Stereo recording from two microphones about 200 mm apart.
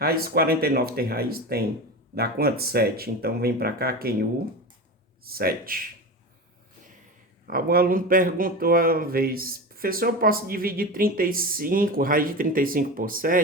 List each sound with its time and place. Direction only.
0.0 s speech: 50° right (ahead or behind)
7.4 s speech: 50° right (ahead or behind)